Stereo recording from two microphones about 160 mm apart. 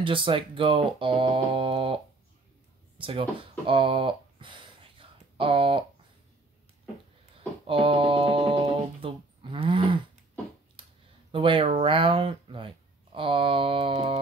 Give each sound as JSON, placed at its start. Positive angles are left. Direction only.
{"t": 0.0, "sound": "speech", "side_deg": -30}
{"t": 3.0, "sound": "speech", "side_deg": -35}
{"t": 7.6, "sound": "music", "side_deg": -35}
{"t": 10.8, "sound": "a sound", "side_deg": -30}